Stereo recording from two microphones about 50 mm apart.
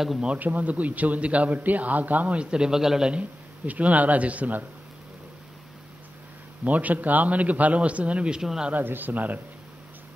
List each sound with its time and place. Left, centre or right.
0.4 s a man's voice: right; by 3.1 s centre
3.1 s a man's voice: right
6.6 s a man's voice: right
8.4 s speech: centre
8.7 s a man's voice: right